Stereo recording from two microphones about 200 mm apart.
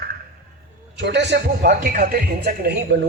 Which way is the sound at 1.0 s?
60° right (ahead or behind).